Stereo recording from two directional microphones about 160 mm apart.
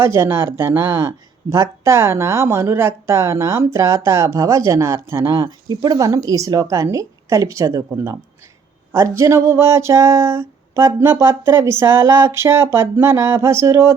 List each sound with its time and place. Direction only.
0.0 s speech: 15° right (ahead or behind)